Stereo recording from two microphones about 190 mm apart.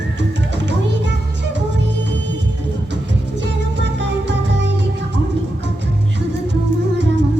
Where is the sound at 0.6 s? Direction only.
65° right (ahead or behind).